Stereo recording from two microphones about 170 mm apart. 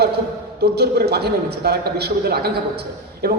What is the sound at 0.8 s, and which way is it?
A man's voice, 70° right (ahead or behind).